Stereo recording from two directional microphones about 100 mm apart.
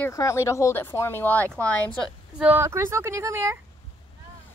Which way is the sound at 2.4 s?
20° right (ahead or behind).